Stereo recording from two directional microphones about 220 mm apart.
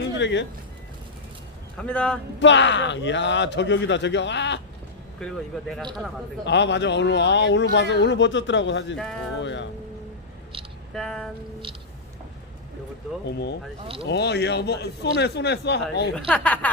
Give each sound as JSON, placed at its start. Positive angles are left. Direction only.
{"t": 0.2, "sound": "speech", "side_deg": 55}
{"t": 1.8, "sound": "speech", "side_deg": 5}
{"t": 2.4, "sound": "speech", "side_deg": 55}
{"t": 5.2, "sound": "speech", "side_deg": 0}
{"t": 6.4, "sound": "speech", "side_deg": 55}
{"t": 10.9, "sound": "speech", "side_deg": 0}
{"t": 13.2, "sound": "speech", "side_deg": 50}
{"t": 16.1, "sound": "speech", "side_deg": 5}